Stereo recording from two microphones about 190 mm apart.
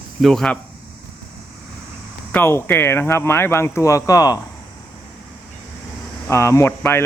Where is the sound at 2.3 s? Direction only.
10° left (ahead or behind).